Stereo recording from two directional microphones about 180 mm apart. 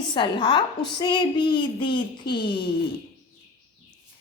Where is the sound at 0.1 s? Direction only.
25° left (ahead or behind).